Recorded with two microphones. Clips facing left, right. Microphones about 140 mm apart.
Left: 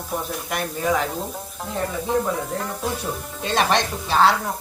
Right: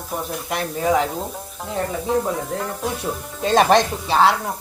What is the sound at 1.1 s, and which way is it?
Speech, centre (ahead or behind).